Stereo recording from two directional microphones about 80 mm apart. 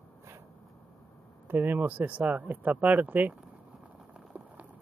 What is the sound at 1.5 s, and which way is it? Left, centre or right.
Speech, right.